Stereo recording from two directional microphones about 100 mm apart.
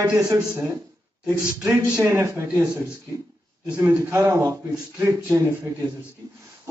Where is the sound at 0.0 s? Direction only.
35° right (ahead or behind).